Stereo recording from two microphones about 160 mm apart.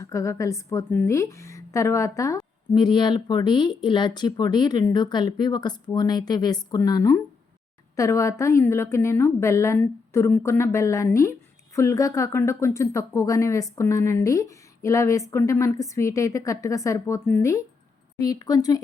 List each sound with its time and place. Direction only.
0.0 s a woman's voice: 20° left (ahead or behind)